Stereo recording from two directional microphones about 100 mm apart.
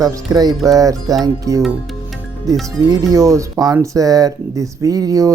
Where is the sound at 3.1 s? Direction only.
35° right (ahead or behind).